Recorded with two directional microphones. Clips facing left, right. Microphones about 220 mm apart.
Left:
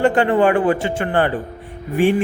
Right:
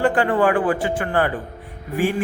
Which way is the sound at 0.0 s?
25° left (ahead or behind).